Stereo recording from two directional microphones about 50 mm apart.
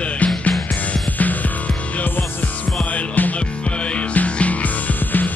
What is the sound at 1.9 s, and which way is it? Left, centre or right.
Music, left.